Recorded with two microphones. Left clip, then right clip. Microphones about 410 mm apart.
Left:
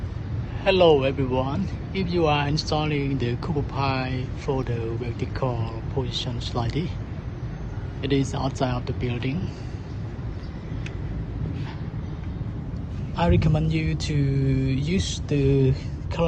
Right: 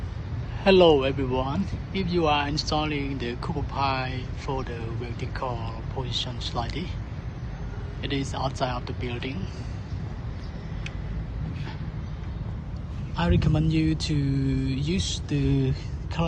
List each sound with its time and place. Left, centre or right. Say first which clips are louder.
0.6 s speech: even; centre
6.1 s speech: even; centre
8.0 s speech: left 4 dB; centre
13.1 s speech: left 3 dB; centre